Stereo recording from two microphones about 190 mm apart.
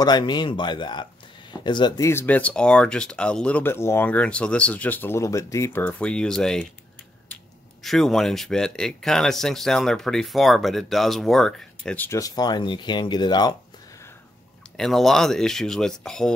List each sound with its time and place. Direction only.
0.0 s speech: 25° left (ahead or behind); by 6.7 s 5° left (ahead or behind)
7.8 s speech: centre (ahead or behind); by 13.6 s 20° left (ahead or behind)
14.8 s speech: centre (ahead or behind)